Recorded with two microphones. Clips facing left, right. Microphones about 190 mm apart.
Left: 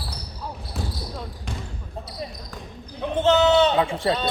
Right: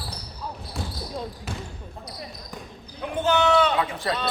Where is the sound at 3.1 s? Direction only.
25° left (ahead or behind).